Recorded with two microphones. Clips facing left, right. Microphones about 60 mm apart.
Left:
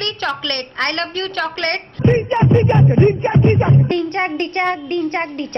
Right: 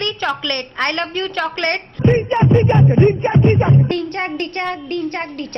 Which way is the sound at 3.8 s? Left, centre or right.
Left.